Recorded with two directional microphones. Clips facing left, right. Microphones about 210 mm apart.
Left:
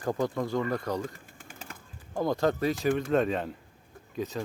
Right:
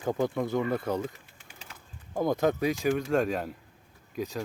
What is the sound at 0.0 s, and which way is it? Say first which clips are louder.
Speech: right 1 dB; 5° right (ahead or behind).